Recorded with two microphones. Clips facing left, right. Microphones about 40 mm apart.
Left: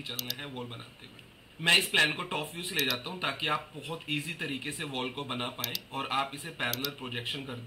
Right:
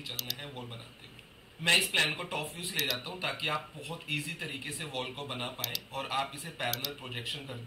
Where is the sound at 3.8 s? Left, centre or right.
Left.